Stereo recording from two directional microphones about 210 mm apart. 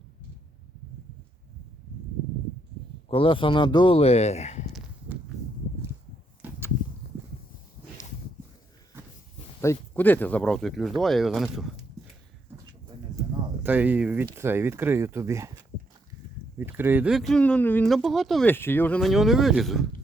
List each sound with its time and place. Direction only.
3.1 s speech: 25° left (ahead or behind)
6.4 s a sound: 10° right (ahead or behind)
7.0 s a sound: 45° left (ahead or behind)
9.6 s speech: 10° left (ahead or behind)
13.6 s speech: 10° right (ahead or behind)
16.6 s speech: 10° right (ahead or behind)